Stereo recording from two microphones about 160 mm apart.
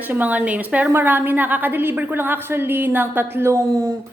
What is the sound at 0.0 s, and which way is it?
Speech, 10° right (ahead or behind).